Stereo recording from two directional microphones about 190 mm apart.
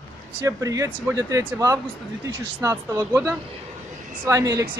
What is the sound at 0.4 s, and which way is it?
Speech, 15° right (ahead or behind).